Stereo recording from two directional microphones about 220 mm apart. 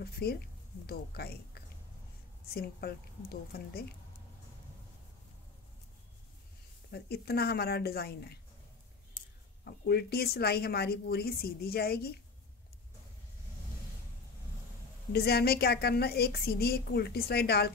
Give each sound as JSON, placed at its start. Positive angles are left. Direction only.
{"t": 0.0, "sound": "a woman's voice", "side_deg": 45}
{"t": 6.9, "sound": "a woman's voice", "side_deg": 45}
{"t": 9.7, "sound": "a woman's voice", "side_deg": 45}
{"t": 15.1, "sound": "a woman's voice", "side_deg": 45}